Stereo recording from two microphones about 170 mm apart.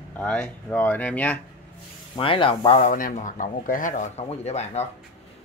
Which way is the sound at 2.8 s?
50° left (ahead or behind).